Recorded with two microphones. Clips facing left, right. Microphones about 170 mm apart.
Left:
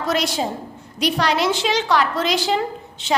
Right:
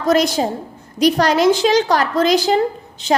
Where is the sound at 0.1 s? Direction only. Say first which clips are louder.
Right 7 dB; 40° right (ahead or behind).